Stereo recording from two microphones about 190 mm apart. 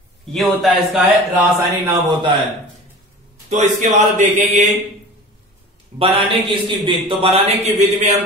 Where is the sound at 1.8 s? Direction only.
20° right (ahead or behind).